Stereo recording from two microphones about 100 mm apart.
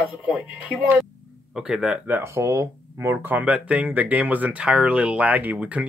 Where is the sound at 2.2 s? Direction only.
30° right (ahead or behind).